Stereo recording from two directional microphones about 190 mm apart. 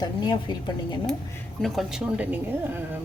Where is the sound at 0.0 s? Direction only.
25° left (ahead or behind).